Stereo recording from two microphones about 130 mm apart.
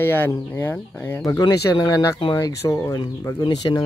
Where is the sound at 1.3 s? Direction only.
30° left (ahead or behind).